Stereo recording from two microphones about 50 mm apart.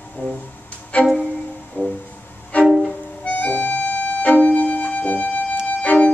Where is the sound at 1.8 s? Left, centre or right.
Left.